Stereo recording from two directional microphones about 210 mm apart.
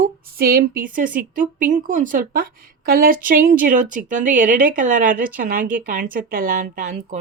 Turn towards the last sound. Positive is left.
turn(degrees=-40)  # may be behind; listen again after turning